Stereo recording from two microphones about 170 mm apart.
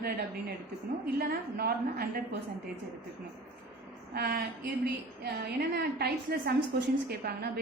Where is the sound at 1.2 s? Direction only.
65° right (ahead or behind).